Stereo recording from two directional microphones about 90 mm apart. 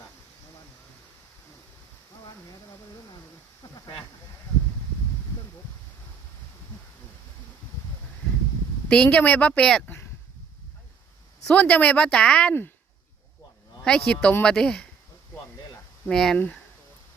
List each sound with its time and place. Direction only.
3.6 s a sound: 45° left (ahead or behind)
8.9 s speech: 15° left (ahead or behind)
11.4 s speech: 15° left (ahead or behind)
13.8 s speech: 10° left (ahead or behind)
16.0 s speech: 5° left (ahead or behind)